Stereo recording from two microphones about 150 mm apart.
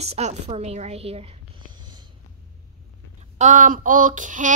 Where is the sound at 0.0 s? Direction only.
45° right (ahead or behind).